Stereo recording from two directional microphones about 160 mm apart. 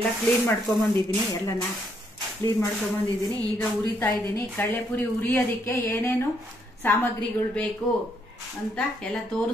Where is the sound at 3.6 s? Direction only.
10° left (ahead or behind).